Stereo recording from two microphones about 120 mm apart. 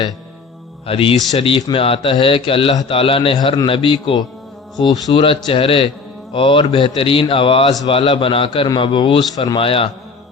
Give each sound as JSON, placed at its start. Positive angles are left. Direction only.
{"t": 0.9, "sound": "a man's voice", "side_deg": 50}
{"t": 9.6, "sound": "a man's voice", "side_deg": 50}